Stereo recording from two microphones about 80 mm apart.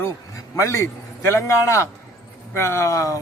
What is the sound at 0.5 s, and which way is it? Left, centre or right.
A man's voice, left.